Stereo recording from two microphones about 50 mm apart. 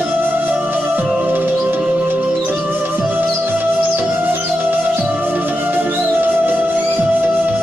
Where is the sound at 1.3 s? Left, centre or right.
Right.